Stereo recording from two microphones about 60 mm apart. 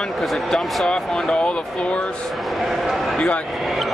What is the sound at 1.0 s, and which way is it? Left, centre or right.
Speech, centre.